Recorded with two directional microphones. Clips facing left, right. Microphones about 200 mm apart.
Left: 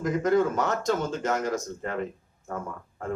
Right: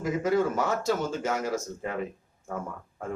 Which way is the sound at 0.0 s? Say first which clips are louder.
Left 2 dB; 5° right (ahead or behind).